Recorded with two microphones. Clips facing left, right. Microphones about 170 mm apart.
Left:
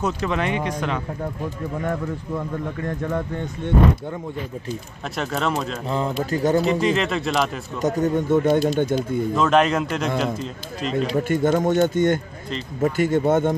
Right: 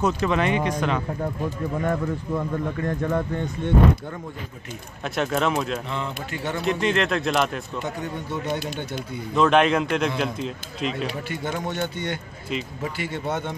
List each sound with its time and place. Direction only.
0.0 s speech: 10° right (ahead or behind)
5.0 s a man's voice: centre (ahead or behind)
5.9 s speech: 40° left (ahead or behind)
6.6 s a man's voice: centre (ahead or behind)
7.8 s speech: 45° left (ahead or behind)
9.3 s a man's voice: centre (ahead or behind)
11.2 s speech: 50° left (ahead or behind)